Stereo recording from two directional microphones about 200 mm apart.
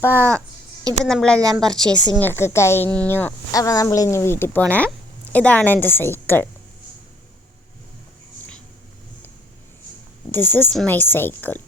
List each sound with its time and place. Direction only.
0.0 s a woman's voice: 10° left (ahead or behind)
1.4 s a woman's voice: 15° right (ahead or behind)
2.1 s speech: 10° left (ahead or behind)
10.3 s speech: 10° left (ahead or behind)